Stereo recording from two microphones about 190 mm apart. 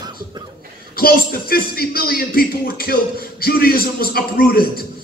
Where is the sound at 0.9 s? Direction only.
55° left (ahead or behind).